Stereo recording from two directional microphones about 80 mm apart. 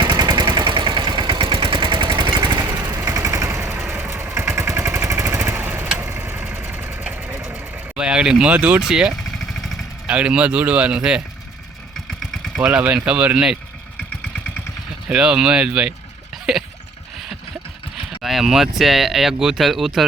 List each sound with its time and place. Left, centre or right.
0.0 s vehicle: right
3.6 s vehicle: right
7.9 s a man's voice: centre
9.5 s vehicle: centre
10.1 s a man's voice: centre
12.2 s engine: centre
12.6 s a man's voice: centre
15.1 s a man's voice: centre
18.2 s speech: centre